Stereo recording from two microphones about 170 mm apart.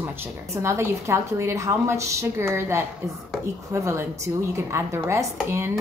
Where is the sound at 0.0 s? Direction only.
15° right (ahead or behind).